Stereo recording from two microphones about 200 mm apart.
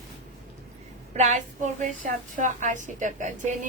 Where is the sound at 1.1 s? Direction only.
35° right (ahead or behind).